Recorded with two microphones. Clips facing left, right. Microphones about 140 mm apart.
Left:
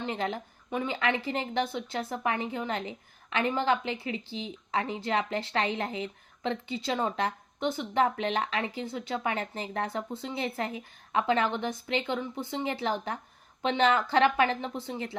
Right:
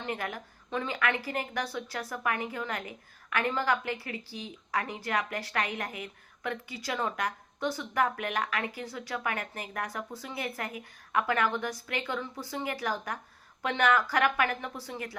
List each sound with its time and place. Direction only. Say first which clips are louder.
0.0 s a woman's voice: left 3 dB; 25° left (ahead or behind)